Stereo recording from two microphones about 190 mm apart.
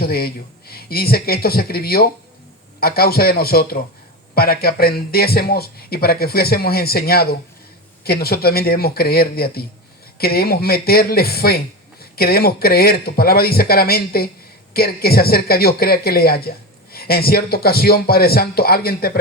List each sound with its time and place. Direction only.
0.0 s a man's voice: 55° left (ahead or behind)